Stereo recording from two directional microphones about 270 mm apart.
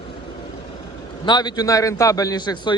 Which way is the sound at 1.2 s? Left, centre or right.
Centre.